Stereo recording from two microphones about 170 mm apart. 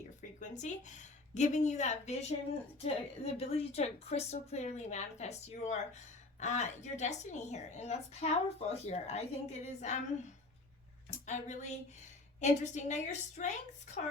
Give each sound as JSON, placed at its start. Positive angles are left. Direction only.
{"t": 0.2, "sound": "a woman's voice", "side_deg": 45}
{"t": 11.3, "sound": "a woman's voice", "side_deg": 45}